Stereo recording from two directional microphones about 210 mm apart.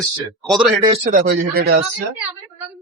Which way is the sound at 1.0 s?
40° right (ahead or behind).